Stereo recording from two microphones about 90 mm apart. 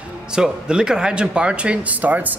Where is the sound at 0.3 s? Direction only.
10° right (ahead or behind).